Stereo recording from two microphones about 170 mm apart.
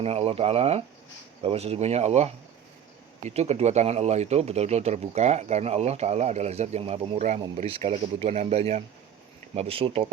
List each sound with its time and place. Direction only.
0.0 s a man's voice: 35° right (ahead or behind)